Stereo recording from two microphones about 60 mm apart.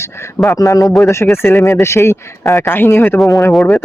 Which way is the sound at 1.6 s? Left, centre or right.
Left.